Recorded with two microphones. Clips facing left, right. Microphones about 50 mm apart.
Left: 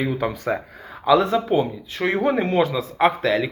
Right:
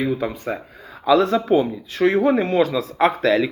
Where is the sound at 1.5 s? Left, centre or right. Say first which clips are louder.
Right 3 dB; centre.